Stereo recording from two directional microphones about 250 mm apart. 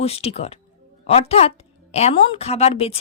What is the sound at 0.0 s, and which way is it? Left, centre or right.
A woman's voice, left.